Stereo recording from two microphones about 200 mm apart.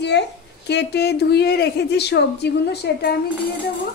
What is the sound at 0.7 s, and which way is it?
A woman's voice, 55° left (ahead or behind).